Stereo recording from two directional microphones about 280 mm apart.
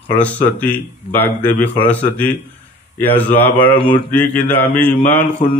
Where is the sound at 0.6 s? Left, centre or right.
Centre.